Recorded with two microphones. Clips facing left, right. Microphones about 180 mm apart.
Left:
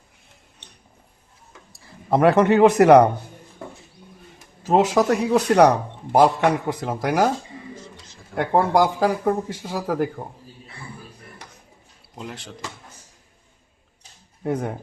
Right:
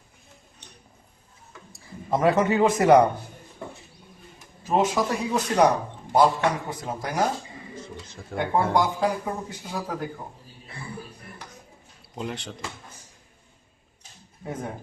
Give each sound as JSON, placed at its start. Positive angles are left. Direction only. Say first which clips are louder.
{"t": 2.0, "sound": "a man's voice", "louder": "left 5 dB", "side_deg": 65}
{"t": 4.6, "sound": "a man's voice", "louder": "left 5 dB", "side_deg": 75}
{"t": 8.4, "sound": "a man's voice", "louder": "left 4 dB", "side_deg": 75}
{"t": 12.1, "sound": "speech", "louder": "right 3 dB", "side_deg": 0}
{"t": 14.4, "sound": "speech", "louder": "left 8 dB", "side_deg": 70}